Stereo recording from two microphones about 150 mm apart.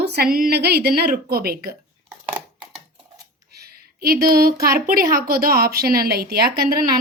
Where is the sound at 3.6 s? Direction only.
90° right.